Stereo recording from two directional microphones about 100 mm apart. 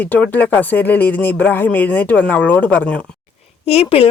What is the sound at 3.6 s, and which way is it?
Speech, 85° left.